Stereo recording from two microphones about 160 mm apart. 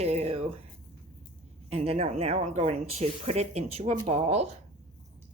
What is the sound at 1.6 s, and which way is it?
Speech, 40° right (ahead or behind).